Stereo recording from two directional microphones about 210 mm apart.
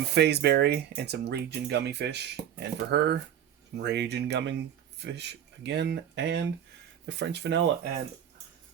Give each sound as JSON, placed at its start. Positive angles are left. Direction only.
{"t": 0.1, "sound": "speech", "side_deg": -50}